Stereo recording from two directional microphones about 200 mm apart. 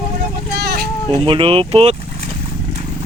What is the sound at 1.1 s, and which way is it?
Speech, 25° right (ahead or behind).